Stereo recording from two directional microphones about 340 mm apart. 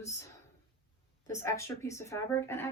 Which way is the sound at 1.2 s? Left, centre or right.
Centre.